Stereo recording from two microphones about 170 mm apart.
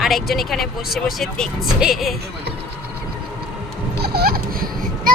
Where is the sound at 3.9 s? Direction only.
65° right (ahead or behind).